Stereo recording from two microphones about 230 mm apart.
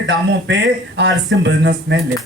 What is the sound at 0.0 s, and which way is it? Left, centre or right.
Speech, right.